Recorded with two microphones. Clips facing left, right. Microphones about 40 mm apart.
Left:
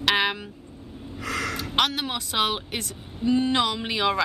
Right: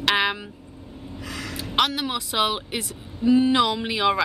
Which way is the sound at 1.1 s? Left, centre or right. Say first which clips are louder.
Left 5 dB; left.